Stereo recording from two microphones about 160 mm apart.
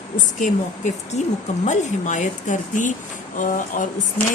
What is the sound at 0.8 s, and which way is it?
Speech, 50° left (ahead or behind).